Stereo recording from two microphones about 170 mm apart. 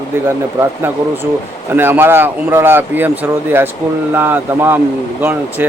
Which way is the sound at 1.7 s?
10° right (ahead or behind).